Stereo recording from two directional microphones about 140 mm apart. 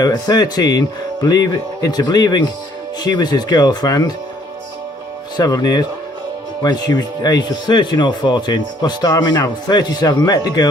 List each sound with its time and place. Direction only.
0.0 s speech: 25° left (ahead or behind)
5.4 s speech: 25° left (ahead or behind)